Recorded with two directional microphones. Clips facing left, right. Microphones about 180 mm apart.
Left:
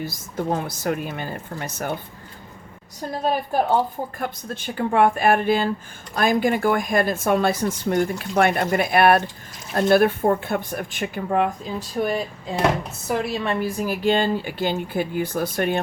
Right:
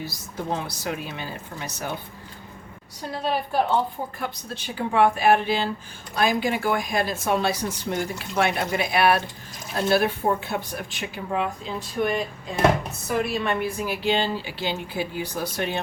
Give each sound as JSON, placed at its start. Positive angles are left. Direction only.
{"t": 0.0, "sound": "speech", "side_deg": 50}
{"t": 3.1, "sound": "speech", "side_deg": 45}
{"t": 13.4, "sound": "speech", "side_deg": 35}